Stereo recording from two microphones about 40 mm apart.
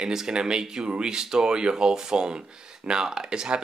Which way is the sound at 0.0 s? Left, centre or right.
Centre.